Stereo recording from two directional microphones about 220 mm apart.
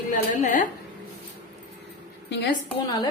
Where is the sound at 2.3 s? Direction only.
50° left (ahead or behind).